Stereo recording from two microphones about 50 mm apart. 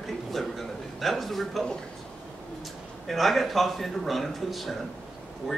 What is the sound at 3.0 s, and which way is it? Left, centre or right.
Speech, centre.